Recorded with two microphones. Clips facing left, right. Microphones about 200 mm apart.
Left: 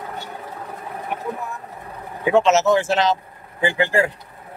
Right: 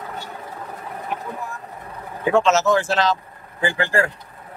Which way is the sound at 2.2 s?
20° left (ahead or behind).